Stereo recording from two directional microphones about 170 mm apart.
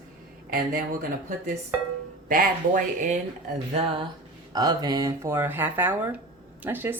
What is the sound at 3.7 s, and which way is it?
Speech, 30° right (ahead or behind).